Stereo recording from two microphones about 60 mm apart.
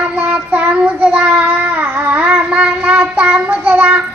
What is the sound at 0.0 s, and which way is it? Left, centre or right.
Child singing, right.